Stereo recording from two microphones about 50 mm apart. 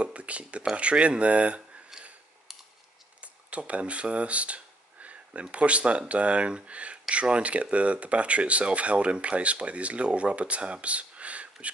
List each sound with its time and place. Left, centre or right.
0.0 s speech: right
3.2 s speech: right